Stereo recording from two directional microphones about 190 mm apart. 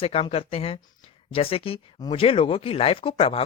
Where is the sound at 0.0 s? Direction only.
30° left (ahead or behind).